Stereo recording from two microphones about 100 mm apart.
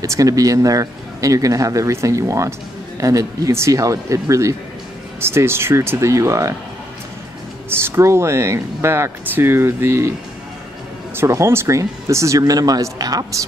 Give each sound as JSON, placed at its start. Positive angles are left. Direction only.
{"t": 0.0, "sound": "speech", "side_deg": -35}
{"t": 7.8, "sound": "speech", "side_deg": -25}
{"t": 11.1, "sound": "speech", "side_deg": -30}